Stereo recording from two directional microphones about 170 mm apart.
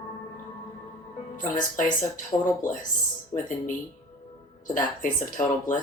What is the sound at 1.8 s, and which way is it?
Speech, 50° left (ahead or behind).